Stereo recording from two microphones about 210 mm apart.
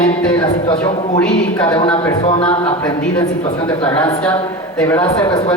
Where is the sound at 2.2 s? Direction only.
25° left (ahead or behind).